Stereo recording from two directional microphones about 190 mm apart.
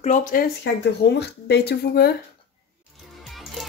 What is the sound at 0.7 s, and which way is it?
Speech, 65° left (ahead or behind).